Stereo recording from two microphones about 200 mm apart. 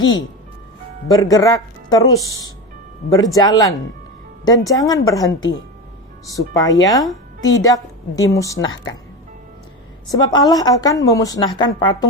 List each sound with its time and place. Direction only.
1.0 s speech: 15° left (ahead or behind)
10.1 s a woman's voice: 20° left (ahead or behind)